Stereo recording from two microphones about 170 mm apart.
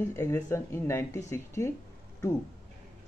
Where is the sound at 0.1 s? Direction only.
15° left (ahead or behind).